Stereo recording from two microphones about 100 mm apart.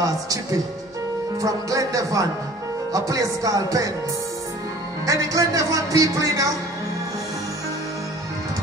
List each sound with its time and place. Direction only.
1.4 s speech: 35° right (ahead or behind)
5.0 s speech: 35° right (ahead or behind)